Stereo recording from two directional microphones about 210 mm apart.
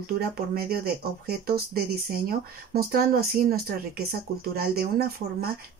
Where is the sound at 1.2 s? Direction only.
45° right (ahead or behind).